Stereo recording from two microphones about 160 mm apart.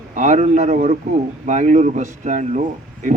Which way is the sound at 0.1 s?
50° right (ahead or behind).